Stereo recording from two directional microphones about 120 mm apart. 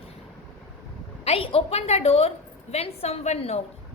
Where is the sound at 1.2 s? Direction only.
55° left (ahead or behind).